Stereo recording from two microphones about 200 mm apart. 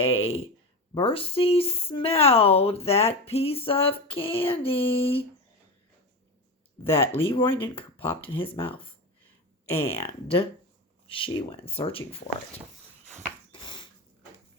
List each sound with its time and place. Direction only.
0.0 s speech: 30° left (ahead or behind)
6.8 s speech: 10° left (ahead or behind)
8.1 s speech: 25° left (ahead or behind)
9.7 s speech: 15° left (ahead or behind)
10.2 s speech: 30° left (ahead or behind)
13.5 s a sound: 25° left (ahead or behind)